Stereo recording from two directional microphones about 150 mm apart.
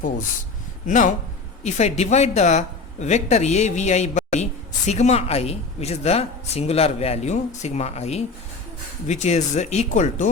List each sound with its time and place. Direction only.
0.9 s speech: 55° left (ahead or behind)